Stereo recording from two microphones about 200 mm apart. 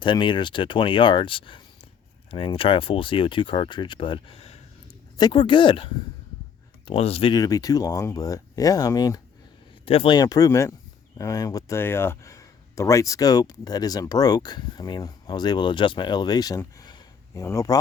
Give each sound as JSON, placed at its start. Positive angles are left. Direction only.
{"t": 0.0, "sound": "speech", "side_deg": 25}